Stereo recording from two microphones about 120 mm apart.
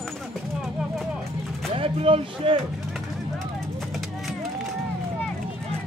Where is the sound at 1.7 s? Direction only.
50° right (ahead or behind).